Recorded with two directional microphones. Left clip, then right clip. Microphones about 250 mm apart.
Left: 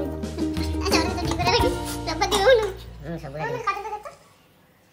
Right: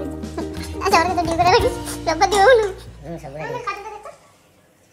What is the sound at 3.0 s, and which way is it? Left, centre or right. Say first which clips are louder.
Speech: right 2 dB; centre.